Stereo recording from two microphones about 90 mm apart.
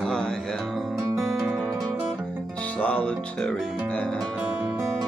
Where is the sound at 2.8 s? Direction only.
15° left (ahead or behind).